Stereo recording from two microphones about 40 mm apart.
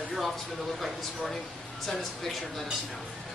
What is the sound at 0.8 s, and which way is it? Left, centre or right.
Speech, centre.